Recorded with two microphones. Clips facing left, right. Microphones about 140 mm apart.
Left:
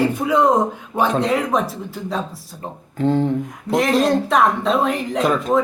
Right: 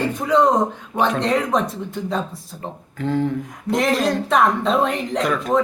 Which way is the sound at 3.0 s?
25° left (ahead or behind).